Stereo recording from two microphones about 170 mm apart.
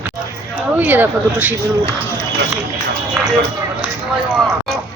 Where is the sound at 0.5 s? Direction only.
10° right (ahead or behind).